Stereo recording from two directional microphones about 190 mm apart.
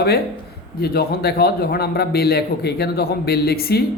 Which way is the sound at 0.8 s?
55° left (ahead or behind).